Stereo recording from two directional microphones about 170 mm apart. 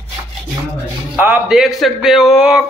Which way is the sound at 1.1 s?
10° right (ahead or behind).